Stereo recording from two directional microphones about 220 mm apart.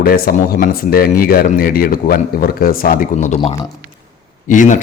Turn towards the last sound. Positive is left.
turn(degrees=35)  # may be behind; listen again after turning